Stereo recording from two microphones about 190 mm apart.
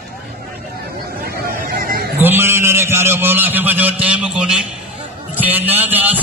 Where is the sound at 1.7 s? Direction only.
50° right (ahead or behind).